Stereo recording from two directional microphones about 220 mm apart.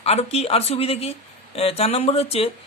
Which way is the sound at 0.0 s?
30° left (ahead or behind).